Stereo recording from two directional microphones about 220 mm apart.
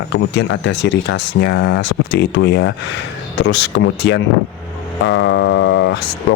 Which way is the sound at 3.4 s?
55° left (ahead or behind).